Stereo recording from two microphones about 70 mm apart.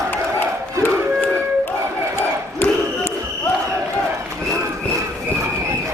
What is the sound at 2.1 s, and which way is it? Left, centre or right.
Battle cry, left.